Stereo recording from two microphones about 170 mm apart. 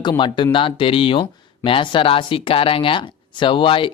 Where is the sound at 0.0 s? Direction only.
25° left (ahead or behind).